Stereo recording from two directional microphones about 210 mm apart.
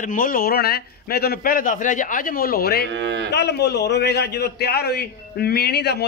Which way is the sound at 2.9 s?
60° right (ahead or behind).